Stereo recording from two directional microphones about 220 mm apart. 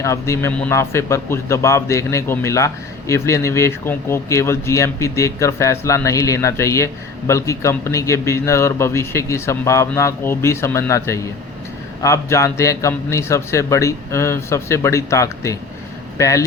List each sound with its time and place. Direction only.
0.0 s a man's voice: 15° left (ahead or behind)